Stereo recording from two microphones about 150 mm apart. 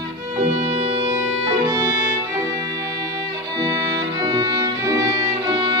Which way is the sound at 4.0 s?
30° right (ahead or behind).